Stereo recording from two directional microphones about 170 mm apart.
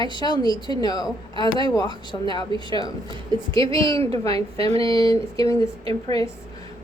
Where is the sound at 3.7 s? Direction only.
20° left (ahead or behind).